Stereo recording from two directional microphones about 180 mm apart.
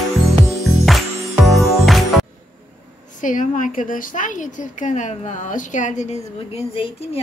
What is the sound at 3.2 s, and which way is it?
A woman's voice, 45° left (ahead or behind).